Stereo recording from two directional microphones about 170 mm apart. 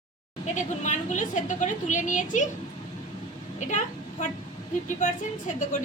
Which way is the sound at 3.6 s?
45° left (ahead or behind).